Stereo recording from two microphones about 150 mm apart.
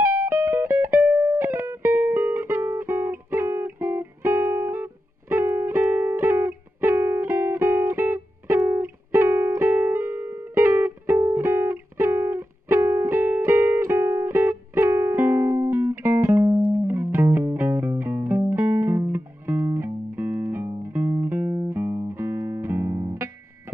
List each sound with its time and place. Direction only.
0.2 s music: 20° right (ahead or behind)